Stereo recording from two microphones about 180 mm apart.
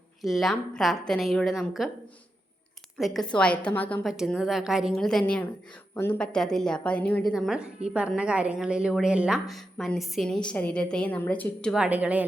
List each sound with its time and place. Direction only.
0.2 s a woman's voice: centre (ahead or behind)
3.0 s a woman's voice: centre (ahead or behind)